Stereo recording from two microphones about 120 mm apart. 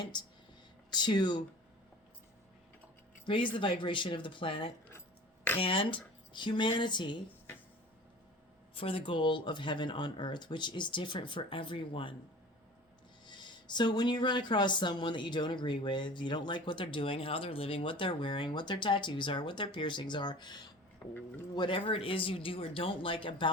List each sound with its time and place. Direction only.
0.1 s speech: 40° left (ahead or behind)
3.2 s speech: 45° left (ahead or behind)
8.7 s speech: 50° left (ahead or behind)
13.2 s speech: 40° left (ahead or behind)
21.1 s speech: 15° left (ahead or behind)
21.5 s speech: 40° left (ahead or behind)